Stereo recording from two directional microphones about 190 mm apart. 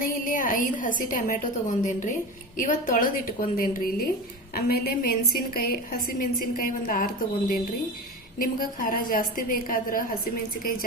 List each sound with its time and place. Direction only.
0.0 s a woman's voice: 45° left (ahead or behind)